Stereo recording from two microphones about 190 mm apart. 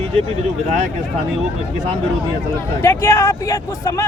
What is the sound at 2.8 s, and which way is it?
Speech, 15° left (ahead or behind).